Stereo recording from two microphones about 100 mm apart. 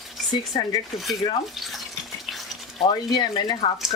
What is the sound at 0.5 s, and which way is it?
Speech, 55° left (ahead or behind).